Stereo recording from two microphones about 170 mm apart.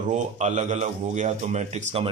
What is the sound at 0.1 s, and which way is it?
Speech, 45° right (ahead or behind).